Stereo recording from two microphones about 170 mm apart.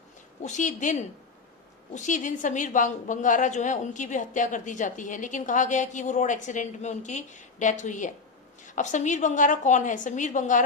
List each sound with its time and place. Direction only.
0.4 s a woman's voice: 45° left (ahead or behind)